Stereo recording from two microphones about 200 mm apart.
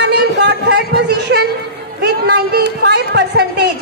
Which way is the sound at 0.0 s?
55° right (ahead or behind).